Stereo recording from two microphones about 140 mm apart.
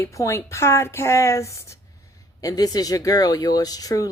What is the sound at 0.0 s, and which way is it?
Speech, 20° left (ahead or behind).